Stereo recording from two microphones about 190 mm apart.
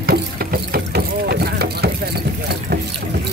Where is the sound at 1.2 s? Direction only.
55° right (ahead or behind).